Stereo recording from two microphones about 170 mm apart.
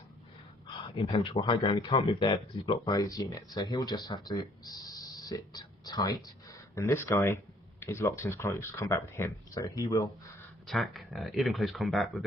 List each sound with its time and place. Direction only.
0.9 s speech: 30° left (ahead or behind)
10.7 s speech: centre (ahead or behind)